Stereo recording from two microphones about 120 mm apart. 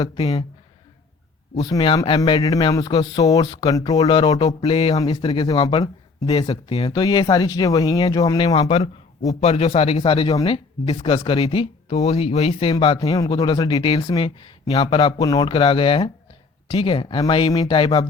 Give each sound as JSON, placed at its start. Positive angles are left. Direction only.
{"t": 0.2, "sound": "speech", "side_deg": 45}
{"t": 1.6, "sound": "speech", "side_deg": 40}
{"t": 2.4, "sound": "speech", "side_deg": 30}
{"t": 4.6, "sound": "speech", "side_deg": 50}
{"t": 4.9, "sound": "speech", "side_deg": 40}
{"t": 5.5, "sound": "speech", "side_deg": 30}
{"t": 6.2, "sound": "speech", "side_deg": 45}
{"t": 8.5, "sound": "a man's voice", "side_deg": 55}
{"t": 13.1, "sound": "speech", "side_deg": 30}